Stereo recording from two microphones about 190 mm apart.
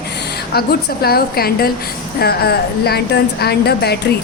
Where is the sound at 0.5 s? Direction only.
55° left (ahead or behind).